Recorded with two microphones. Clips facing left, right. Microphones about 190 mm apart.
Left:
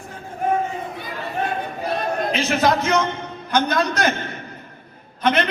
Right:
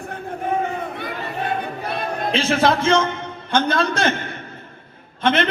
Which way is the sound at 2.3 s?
30° right (ahead or behind).